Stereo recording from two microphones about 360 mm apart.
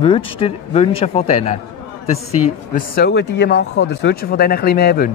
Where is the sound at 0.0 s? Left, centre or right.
Centre.